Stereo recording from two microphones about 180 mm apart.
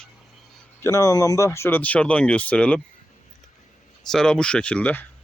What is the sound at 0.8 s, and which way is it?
Speech, 20° left (ahead or behind).